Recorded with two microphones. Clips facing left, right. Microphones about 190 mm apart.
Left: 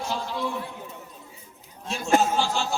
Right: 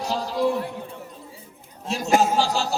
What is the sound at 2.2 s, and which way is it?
Speech, 40° right (ahead or behind).